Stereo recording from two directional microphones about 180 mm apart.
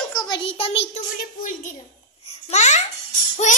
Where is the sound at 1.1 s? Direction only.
50° left (ahead or behind).